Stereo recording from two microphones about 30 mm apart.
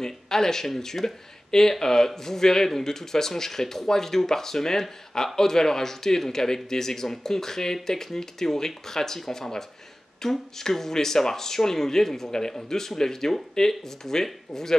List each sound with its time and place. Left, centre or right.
0.0 s speech: centre